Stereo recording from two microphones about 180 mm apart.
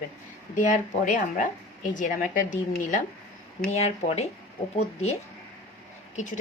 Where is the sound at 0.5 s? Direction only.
45° left (ahead or behind).